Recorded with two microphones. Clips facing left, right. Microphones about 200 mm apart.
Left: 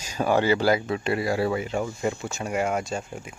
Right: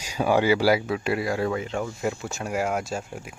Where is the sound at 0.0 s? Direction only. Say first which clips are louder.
Right 1 dB; 10° right (ahead or behind).